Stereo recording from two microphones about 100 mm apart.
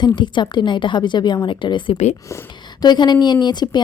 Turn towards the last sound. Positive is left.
turn(degrees=45)  # may be behind; listen again after turning